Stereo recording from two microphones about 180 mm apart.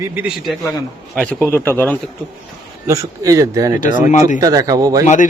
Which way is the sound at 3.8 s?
45° left (ahead or behind).